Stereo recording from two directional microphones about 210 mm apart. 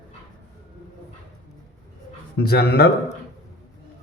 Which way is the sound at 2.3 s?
50° left (ahead or behind).